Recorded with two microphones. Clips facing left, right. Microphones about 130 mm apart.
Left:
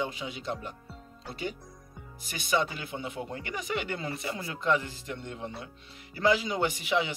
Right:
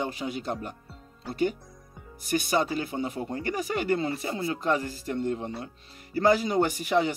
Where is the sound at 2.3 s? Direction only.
45° right (ahead or behind).